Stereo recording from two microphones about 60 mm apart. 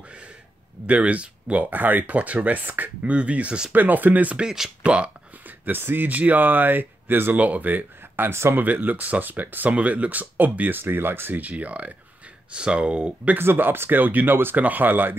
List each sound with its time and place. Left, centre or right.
0.8 s speech: right
3.7 s speech: right
4.4 s speech: centre
5.7 s speech: right
7.3 s speech: right
8.6 s speech: right
13.4 s speech: right